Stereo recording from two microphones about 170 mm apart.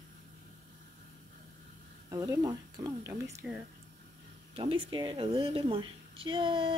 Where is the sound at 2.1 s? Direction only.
20° right (ahead or behind).